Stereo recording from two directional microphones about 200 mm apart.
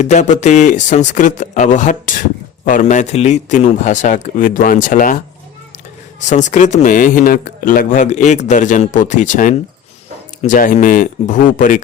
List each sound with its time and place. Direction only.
0.0 s speech: 35° left (ahead or behind)
6.2 s speech: 35° left (ahead or behind)